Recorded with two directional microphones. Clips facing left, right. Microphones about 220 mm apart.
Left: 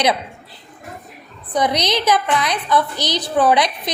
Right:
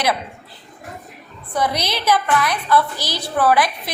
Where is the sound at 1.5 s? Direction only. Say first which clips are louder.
Left 3 dB; 20° left (ahead or behind).